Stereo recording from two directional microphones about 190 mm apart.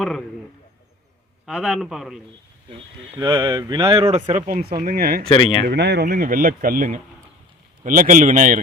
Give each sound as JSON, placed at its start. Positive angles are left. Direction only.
{"t": 1.5, "sound": "a man's voice", "side_deg": 0}
{"t": 3.2, "sound": "speech", "side_deg": -20}
{"t": 4.4, "sound": "speech", "side_deg": -50}
{"t": 5.3, "sound": "speech", "side_deg": 25}
{"t": 5.6, "sound": "speech", "side_deg": -65}